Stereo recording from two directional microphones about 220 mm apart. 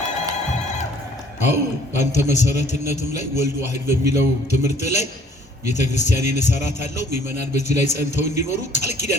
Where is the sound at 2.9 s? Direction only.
30° left (ahead or behind).